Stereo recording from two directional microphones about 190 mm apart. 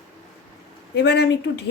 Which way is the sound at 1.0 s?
60° left (ahead or behind).